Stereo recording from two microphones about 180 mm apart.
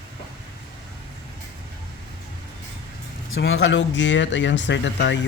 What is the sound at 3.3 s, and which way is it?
Speech, 90° left.